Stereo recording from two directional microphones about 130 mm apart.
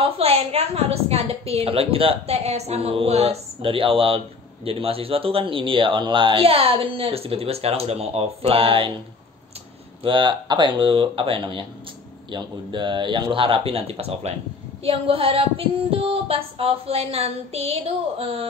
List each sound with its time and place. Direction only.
0.0 s speech: 50° right (ahead or behind)
10.0 s speech: 40° right (ahead or behind)